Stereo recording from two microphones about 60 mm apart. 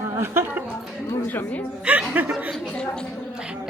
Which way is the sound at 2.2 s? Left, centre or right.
Right.